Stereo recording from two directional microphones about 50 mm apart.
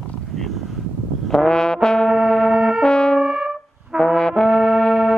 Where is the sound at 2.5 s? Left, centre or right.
Centre.